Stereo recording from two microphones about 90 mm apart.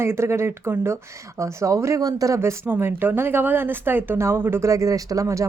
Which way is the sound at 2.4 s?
25° right (ahead or behind).